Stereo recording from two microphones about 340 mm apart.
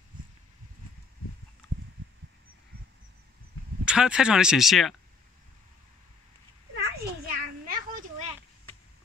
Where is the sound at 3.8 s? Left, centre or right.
Centre.